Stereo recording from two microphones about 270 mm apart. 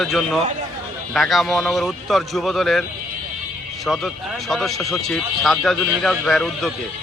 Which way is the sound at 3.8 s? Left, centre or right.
Centre.